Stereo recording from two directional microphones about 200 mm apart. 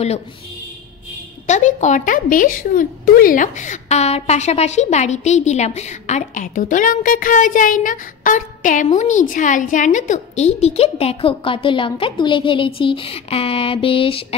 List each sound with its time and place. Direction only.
1.5 s a woman's voice: 35° left (ahead or behind)